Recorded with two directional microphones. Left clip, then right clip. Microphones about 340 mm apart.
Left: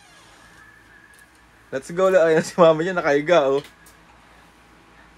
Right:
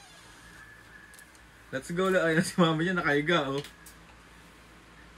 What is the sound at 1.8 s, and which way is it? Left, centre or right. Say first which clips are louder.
Speech: left 10 dB; left.